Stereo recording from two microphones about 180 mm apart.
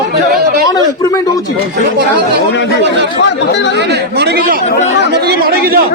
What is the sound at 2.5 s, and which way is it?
Speech, 80° left.